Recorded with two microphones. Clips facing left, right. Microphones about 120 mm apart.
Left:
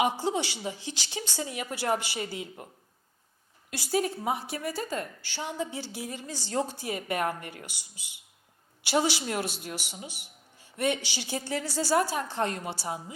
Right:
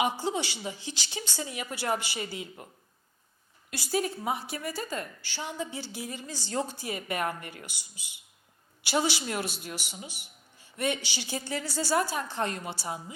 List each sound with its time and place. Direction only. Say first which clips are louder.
0.3 s speech: left 2 dB; 60° left (ahead or behind)
3.7 s a woman's voice: left 2 dB; 55° left (ahead or behind)
6.3 s a woman's voice: left 2 dB; 65° left (ahead or behind)
6.6 s speech: left 2 dB; 40° left (ahead or behind)
9.0 s a woman's voice: left 2 dB; 55° left (ahead or behind)
11.7 s a woman's voice: left 2 dB; 70° left (ahead or behind)
12.1 s speech: left 2 dB; 50° left (ahead or behind)